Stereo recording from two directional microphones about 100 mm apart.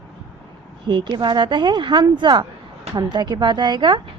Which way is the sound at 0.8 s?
50° right (ahead or behind).